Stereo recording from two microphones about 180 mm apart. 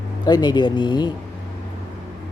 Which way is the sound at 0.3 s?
25° left (ahead or behind).